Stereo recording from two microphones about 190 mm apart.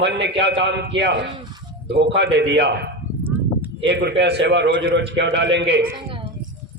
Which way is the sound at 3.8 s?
65° right (ahead or behind).